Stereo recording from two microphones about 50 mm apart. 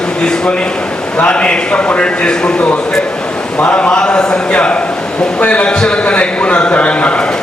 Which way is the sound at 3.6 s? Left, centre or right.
Left.